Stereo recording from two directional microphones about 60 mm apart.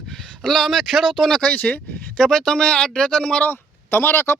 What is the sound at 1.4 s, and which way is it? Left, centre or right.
Speech, left.